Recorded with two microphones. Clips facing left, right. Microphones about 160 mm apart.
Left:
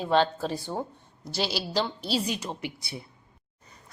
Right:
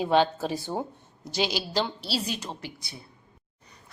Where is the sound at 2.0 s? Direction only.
50° left (ahead or behind).